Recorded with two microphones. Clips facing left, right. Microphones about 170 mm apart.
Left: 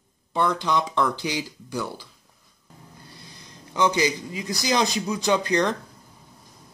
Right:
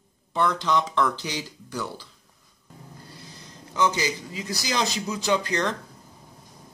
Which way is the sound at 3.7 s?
15° left (ahead or behind).